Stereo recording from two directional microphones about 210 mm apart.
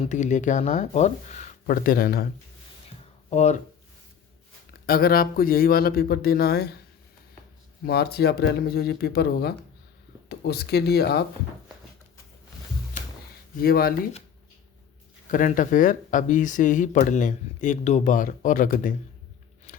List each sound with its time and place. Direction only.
0.0 s speech: 35° left (ahead or behind)
3.2 s speech: 30° left (ahead or behind)
4.9 s speech: 45° left (ahead or behind)
7.9 s speech: 50° left (ahead or behind)
13.6 s speech: 45° left (ahead or behind)
15.3 s speech: 40° left (ahead or behind)